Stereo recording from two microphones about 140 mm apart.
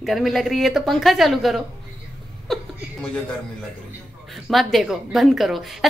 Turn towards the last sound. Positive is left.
turn(degrees=0)  # may be behind; listen again after turning